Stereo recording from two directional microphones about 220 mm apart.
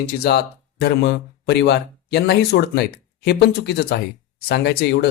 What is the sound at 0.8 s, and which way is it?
Speech, 50° left (ahead or behind).